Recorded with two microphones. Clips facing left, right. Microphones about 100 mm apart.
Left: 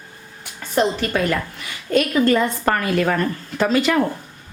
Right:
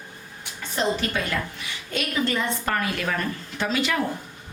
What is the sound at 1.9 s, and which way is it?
A woman's voice, 50° left (ahead or behind).